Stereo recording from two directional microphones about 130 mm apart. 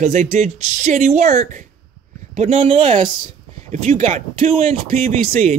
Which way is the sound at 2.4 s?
50° right (ahead or behind).